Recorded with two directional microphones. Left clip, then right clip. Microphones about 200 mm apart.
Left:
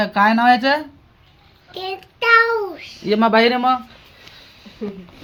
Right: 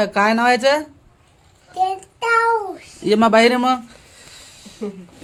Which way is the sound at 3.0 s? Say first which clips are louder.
Right 1 dB; 25° right (ahead or behind).